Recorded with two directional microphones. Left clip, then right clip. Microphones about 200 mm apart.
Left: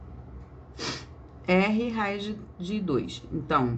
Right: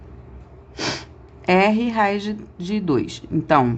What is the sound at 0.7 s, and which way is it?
Speech, 50° right (ahead or behind).